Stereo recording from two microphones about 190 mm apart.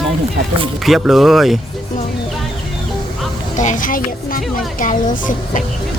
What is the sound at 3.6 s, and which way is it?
A woman's voice, 40° left (ahead or behind).